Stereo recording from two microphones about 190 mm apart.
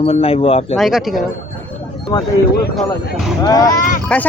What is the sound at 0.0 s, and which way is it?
Speech, 30° left (ahead or behind).